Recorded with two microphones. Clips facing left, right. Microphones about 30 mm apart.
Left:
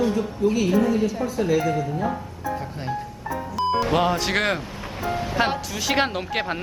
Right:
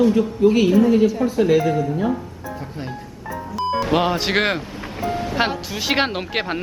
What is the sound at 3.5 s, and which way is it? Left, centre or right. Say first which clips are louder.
Music: right 1 dB; centre.